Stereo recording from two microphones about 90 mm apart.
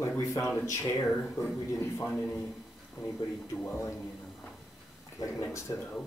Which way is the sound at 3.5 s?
25° left (ahead or behind).